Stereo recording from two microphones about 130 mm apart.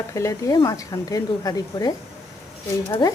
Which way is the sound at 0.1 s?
25° left (ahead or behind).